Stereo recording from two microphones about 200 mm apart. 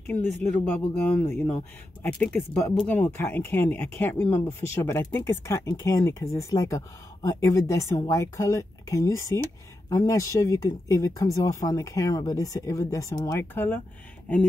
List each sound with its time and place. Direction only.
0.4 s speech: 5° left (ahead or behind)